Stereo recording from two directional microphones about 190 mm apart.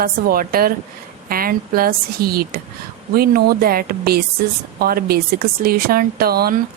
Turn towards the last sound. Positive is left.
turn(degrees=-55)  # may be behind; listen again after turning